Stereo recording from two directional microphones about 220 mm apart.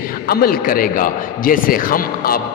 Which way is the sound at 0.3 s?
40° left (ahead or behind).